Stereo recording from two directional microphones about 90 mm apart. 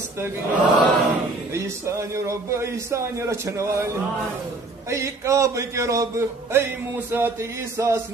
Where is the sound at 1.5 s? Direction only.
30° right (ahead or behind).